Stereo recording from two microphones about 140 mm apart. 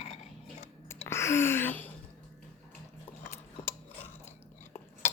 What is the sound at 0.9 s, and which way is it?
Gasp, 20° left (ahead or behind).